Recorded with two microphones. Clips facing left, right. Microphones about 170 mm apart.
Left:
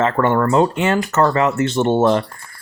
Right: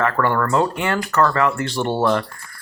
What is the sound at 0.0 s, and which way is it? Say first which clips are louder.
Speech: left 3 dB; 20° left (ahead or behind).